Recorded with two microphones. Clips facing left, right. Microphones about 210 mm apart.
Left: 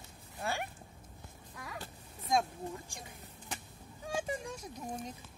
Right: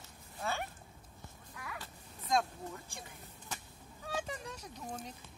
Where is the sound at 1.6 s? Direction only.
30° left (ahead or behind).